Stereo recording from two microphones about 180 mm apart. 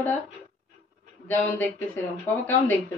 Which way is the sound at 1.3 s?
10° left (ahead or behind).